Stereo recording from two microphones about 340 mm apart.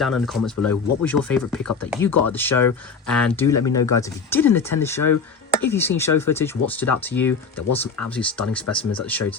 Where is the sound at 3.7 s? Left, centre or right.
Left.